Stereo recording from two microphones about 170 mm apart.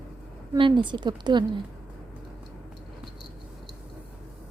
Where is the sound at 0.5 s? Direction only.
25° right (ahead or behind).